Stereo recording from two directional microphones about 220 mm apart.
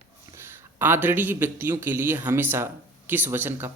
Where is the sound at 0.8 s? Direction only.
10° right (ahead or behind).